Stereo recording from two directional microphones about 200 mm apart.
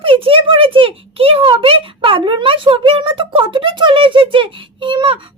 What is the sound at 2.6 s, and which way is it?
A child's voice, 25° right (ahead or behind).